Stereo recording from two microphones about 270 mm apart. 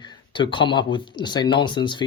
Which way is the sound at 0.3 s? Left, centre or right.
Centre.